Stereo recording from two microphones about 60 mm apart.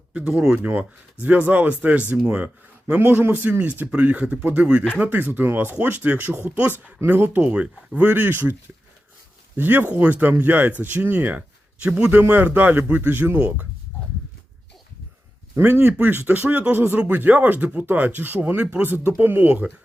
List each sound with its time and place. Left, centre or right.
0.1 s speech: centre
0.6 s speech: right
3.0 s speech: right
7.4 s speech: right
9.6 s speech: right; by 12.1 s centre
12.5 s speech: right
15.5 s speech: right
16.5 s speech: right
16.7 s speech: right